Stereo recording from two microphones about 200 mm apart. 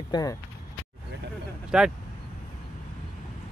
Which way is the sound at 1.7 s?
5° right (ahead or behind).